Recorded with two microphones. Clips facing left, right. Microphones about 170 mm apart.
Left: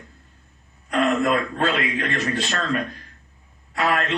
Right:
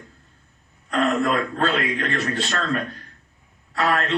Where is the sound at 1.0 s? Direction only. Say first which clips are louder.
Left 1 dB; 15° left (ahead or behind).